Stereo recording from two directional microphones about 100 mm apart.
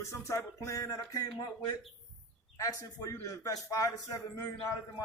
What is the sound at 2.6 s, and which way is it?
A man's voice, 35° left (ahead or behind).